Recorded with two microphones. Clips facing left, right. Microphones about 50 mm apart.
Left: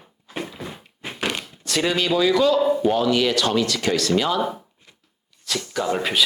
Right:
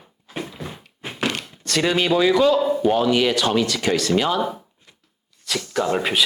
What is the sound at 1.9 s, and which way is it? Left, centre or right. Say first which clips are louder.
Speech: right 2 dB; centre.